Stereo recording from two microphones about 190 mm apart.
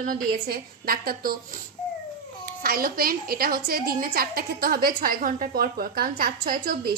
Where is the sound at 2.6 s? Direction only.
50° right (ahead or behind).